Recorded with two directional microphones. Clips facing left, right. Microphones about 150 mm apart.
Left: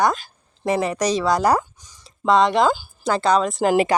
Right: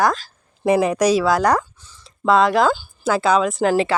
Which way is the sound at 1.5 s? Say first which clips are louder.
Even; 15° left (ahead or behind).